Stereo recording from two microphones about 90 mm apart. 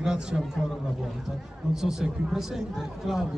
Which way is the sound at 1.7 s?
5° right (ahead or behind).